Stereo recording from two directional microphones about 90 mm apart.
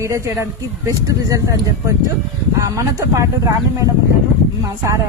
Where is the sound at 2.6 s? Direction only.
40° right (ahead or behind).